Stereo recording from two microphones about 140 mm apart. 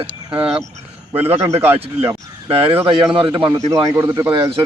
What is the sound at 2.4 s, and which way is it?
Speech, 40° right (ahead or behind).